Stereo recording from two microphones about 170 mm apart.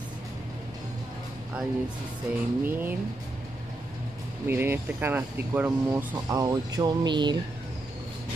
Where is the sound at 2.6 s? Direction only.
10° right (ahead or behind).